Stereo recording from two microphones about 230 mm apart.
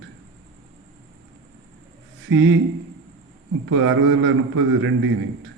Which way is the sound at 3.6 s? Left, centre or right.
Right.